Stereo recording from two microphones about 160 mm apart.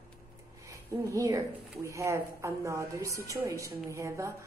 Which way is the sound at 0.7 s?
20° right (ahead or behind).